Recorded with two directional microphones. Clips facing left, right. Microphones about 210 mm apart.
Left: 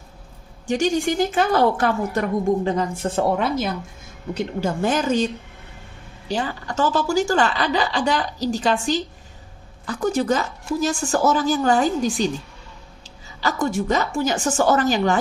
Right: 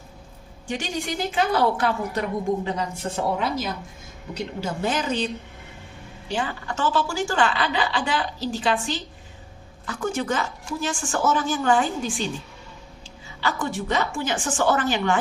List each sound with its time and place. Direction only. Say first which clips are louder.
0.7 s a woman's voice: left 8 dB; 45° left (ahead or behind)
13.4 s a woman's voice: left 5 dB; 40° left (ahead or behind)